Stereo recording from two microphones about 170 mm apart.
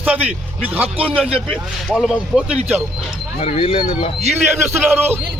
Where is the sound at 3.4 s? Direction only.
35° left (ahead or behind).